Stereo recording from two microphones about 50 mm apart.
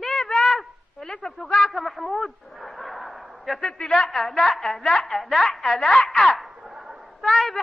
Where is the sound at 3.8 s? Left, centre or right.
Centre.